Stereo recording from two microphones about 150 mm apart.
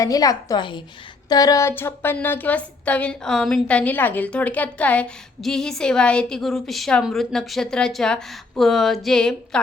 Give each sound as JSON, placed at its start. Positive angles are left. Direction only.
{"t": 0.0, "sound": "a woman's voice", "side_deg": 25}